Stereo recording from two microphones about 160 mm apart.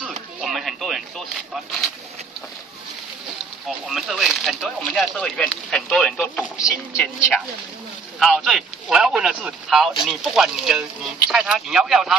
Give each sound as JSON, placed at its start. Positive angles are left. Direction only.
{"t": 0.4, "sound": "a sound", "side_deg": 0}
{"t": 1.5, "sound": "speech", "side_deg": 0}
{"t": 3.6, "sound": "speech", "side_deg": 0}
{"t": 6.4, "sound": "speech", "side_deg": -5}
{"t": 8.2, "sound": "speech", "side_deg": 0}